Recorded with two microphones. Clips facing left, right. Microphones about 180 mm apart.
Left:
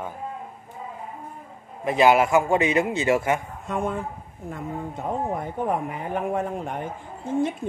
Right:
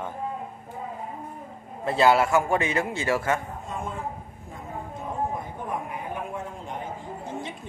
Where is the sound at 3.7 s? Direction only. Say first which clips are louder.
Left 7 dB; 70° left (ahead or behind).